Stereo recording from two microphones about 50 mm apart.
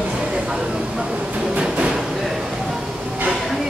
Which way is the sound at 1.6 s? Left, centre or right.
Right.